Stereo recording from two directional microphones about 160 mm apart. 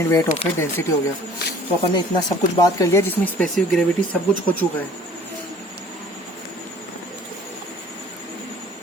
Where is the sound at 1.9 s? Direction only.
25° left (ahead or behind).